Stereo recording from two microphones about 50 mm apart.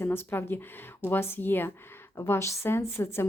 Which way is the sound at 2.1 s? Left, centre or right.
Left.